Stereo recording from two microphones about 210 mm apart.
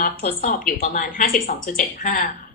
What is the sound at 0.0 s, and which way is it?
A woman's voice, 40° left (ahead or behind).